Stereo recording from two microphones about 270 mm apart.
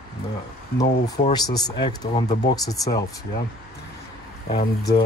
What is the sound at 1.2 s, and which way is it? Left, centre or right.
Speech, centre.